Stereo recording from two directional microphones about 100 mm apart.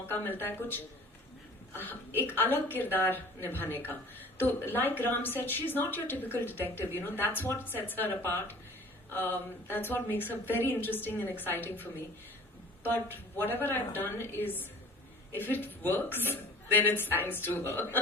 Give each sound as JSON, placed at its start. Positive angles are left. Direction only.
{"t": 0.1, "sound": "a woman's voice", "side_deg": 20}